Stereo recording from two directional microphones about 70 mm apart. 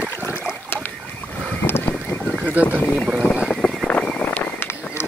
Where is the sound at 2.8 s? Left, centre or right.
Left.